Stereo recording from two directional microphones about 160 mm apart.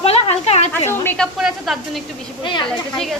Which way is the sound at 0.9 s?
15° left (ahead or behind).